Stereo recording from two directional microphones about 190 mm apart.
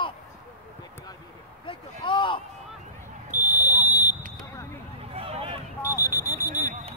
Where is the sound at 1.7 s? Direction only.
25° left (ahead or behind).